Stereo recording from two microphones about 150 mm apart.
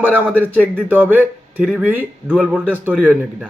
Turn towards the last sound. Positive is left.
turn(degrees=-10)  # may be behind; listen again after turning